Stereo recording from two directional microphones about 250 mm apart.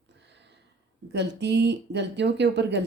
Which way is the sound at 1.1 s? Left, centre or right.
Right.